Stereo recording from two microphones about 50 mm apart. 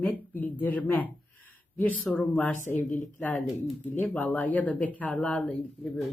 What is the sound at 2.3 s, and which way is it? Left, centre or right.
Speech, left.